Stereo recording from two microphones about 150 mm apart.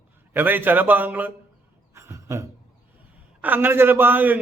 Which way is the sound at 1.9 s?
20° right (ahead or behind).